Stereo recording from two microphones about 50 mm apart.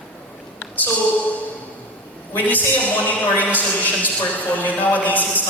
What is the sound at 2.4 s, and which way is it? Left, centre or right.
Speech, left.